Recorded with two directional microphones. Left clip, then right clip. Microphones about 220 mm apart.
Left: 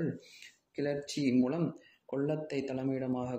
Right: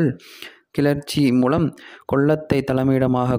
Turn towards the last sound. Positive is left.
turn(degrees=-50)  # may be behind; listen again after turning